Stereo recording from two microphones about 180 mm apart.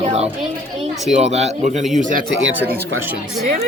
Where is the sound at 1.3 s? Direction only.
35° right (ahead or behind).